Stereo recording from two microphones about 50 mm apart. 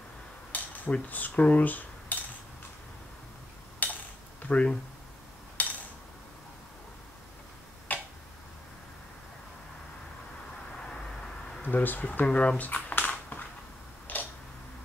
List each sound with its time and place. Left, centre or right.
0.5 s cutlery: left
3.8 s a sound: left
7.9 s tick-tock: left
11.6 s speech: left
12.3 s a sound: left
14.1 s tick-tock: left